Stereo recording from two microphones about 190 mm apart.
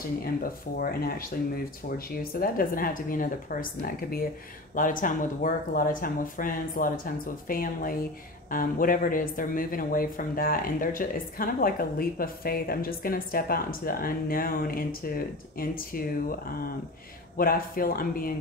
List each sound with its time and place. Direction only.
0.2 s speech: 50° left (ahead or behind)
17.4 s speech: 50° left (ahead or behind)